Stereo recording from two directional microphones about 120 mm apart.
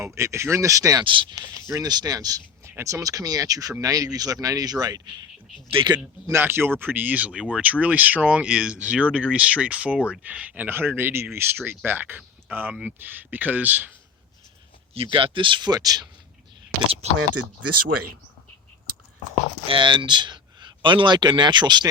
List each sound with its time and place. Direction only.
0.0 s speech: 25° right (ahead or behind)
1.0 s speech: 45° right (ahead or behind)
5.7 s speech: 45° right (ahead or behind)
6.2 s speech: 20° right (ahead or behind)
14.9 s speech: 45° right (ahead or behind)
19.6 s speech: 45° right (ahead or behind)